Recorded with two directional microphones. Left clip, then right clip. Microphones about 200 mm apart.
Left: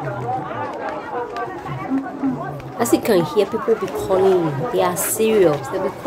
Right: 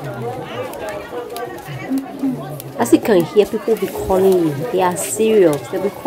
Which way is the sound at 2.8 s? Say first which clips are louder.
Right 3 dB; 15° right (ahead or behind).